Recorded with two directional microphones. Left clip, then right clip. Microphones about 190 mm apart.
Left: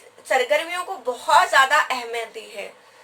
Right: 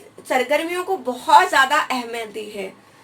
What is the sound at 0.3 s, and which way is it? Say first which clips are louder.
A woman's voice: right 1 dB; 25° right (ahead or behind).